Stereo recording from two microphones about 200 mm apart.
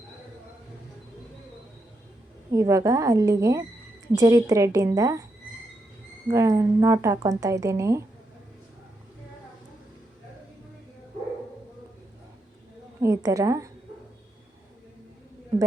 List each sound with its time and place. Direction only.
2.5 s speech: 15° right (ahead or behind)
6.2 s speech: 15° right (ahead or behind)
13.0 s speech: 15° right (ahead or behind)